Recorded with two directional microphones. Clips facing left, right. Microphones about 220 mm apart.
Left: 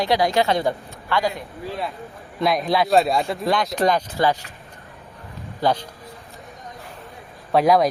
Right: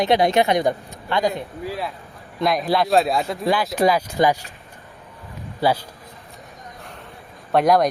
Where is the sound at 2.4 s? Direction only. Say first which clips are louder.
Even; centre (ahead or behind).